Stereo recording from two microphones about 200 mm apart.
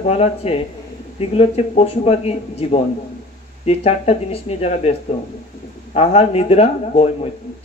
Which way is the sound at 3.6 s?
30° left (ahead or behind).